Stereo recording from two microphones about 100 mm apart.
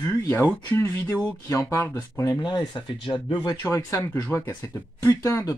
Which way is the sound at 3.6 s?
30° left (ahead or behind).